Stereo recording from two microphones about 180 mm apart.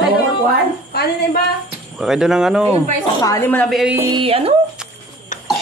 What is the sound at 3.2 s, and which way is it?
Speech, 20° left (ahead or behind).